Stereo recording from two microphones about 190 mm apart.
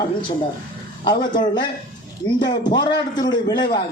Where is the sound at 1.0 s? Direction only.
25° left (ahead or behind).